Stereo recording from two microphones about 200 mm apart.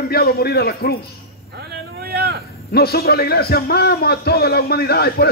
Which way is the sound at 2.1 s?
50° right (ahead or behind).